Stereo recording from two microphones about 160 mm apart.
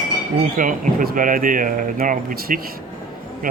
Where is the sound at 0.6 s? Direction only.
55° right (ahead or behind).